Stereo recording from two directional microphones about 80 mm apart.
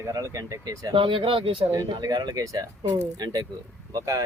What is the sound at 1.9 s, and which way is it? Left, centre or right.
Speech, right.